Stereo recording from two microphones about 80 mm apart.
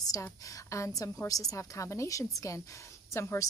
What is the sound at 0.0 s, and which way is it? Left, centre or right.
A woman's voice, left.